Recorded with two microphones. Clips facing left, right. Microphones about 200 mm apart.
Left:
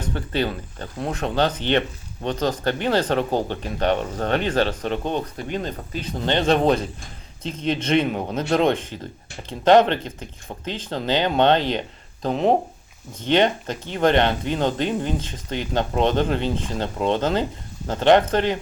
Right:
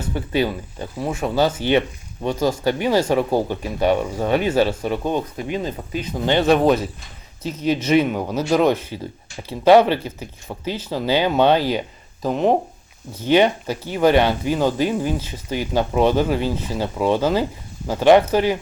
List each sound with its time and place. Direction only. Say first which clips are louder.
0.0 s speech: right 3 dB; 10° right (ahead or behind)